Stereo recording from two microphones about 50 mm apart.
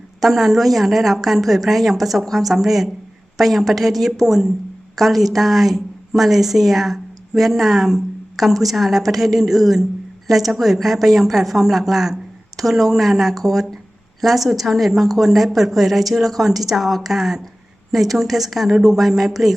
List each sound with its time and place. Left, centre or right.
0.2 s speech: centre